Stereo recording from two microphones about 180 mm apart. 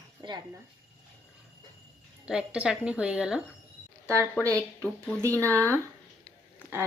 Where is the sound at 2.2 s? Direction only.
5° right (ahead or behind).